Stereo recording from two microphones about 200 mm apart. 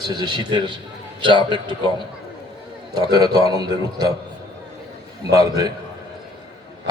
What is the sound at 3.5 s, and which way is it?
Speech, 20° right (ahead or behind).